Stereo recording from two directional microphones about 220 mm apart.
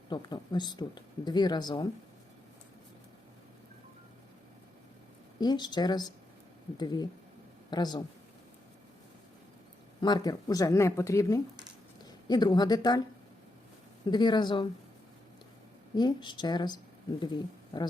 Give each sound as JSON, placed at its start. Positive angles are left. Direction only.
{"t": 0.1, "sound": "speech", "side_deg": 20}
{"t": 5.4, "sound": "speech", "side_deg": 20}
{"t": 10.0, "sound": "speech", "side_deg": 20}
{"t": 14.1, "sound": "speech", "side_deg": 20}
{"t": 16.0, "sound": "speech", "side_deg": 20}